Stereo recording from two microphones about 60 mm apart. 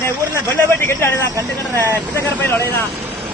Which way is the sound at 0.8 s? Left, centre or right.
Left.